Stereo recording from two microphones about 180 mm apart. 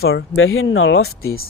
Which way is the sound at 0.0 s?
75° left (ahead or behind).